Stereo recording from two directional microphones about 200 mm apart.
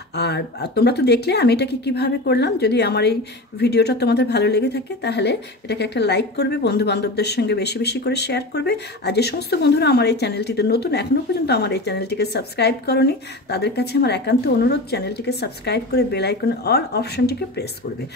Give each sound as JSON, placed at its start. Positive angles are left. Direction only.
{"t": 0.1, "sound": "speech", "side_deg": 55}